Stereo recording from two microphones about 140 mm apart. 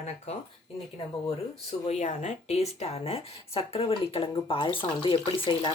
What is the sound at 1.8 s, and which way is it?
Speech, 55° left (ahead or behind).